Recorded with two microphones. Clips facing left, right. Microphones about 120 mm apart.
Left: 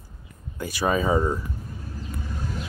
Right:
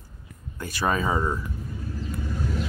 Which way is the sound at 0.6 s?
10° left (ahead or behind).